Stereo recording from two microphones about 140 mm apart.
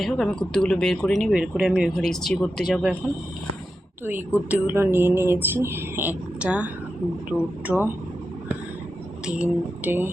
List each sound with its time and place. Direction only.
0.0 s speech: 5° left (ahead or behind)
2.0 s speech: 5° left (ahead or behind)
4.0 s speech: 15° right (ahead or behind)
7.7 s speech: 5° right (ahead or behind)
9.2 s speech: 10° right (ahead or behind)